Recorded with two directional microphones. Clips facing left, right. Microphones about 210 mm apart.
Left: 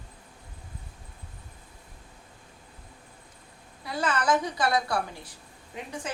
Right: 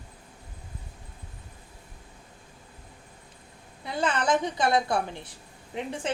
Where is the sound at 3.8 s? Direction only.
20° right (ahead or behind).